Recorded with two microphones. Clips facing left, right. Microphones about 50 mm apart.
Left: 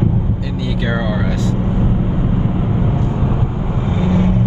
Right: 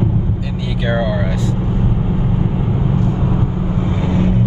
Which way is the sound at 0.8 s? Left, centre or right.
Centre.